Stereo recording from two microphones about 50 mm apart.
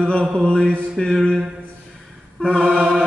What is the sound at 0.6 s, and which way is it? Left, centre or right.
Mantra, centre.